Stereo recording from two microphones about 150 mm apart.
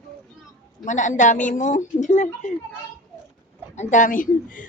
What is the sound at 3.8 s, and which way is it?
Speech, 55° left (ahead or behind).